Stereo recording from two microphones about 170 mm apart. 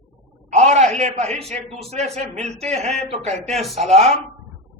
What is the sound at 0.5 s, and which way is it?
Speech, 40° right (ahead or behind).